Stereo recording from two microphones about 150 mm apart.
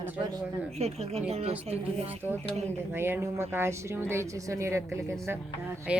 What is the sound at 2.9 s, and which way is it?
A woman's voice, 15° right (ahead or behind).